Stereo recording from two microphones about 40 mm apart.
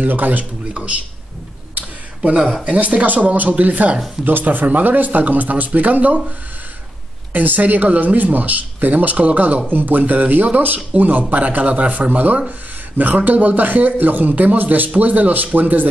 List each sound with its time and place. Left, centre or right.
0.0 s speech: right
0.7 s speech: right
1.8 s a sound: right
2.6 s speech: right
4.3 s speech: right
7.3 s speech: right
14.3 s speech: right